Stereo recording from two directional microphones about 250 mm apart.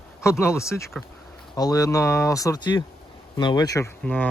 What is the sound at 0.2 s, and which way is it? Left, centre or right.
Speech, centre.